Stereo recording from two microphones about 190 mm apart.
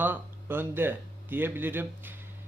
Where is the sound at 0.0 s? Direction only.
10° right (ahead or behind).